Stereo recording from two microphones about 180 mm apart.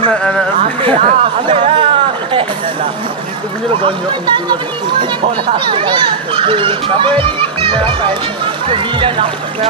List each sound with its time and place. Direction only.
0.9 s speech: 30° right (ahead or behind)
3.8 s speech: 25° right (ahead or behind)